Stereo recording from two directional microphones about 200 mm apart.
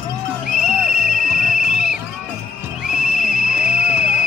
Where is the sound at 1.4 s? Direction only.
5° right (ahead or behind).